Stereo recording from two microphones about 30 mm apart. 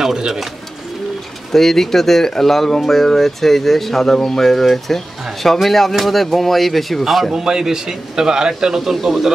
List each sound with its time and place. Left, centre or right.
0.0 s speech: centre
1.5 s speech: centre
7.3 s a man's voice: centre
9.0 s a man's voice: centre